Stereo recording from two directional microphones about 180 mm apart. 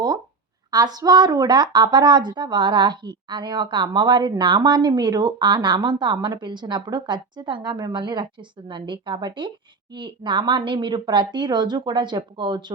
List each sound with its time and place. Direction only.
0.7 s a woman's voice: 20° right (ahead or behind)